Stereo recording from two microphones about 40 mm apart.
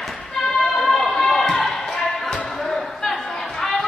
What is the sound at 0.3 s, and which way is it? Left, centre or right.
Basketball bounce, centre.